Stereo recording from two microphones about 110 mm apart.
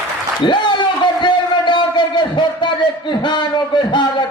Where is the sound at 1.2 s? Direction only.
45° left (ahead or behind).